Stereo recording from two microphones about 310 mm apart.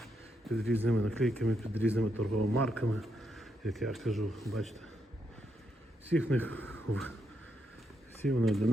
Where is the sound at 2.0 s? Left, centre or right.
Right.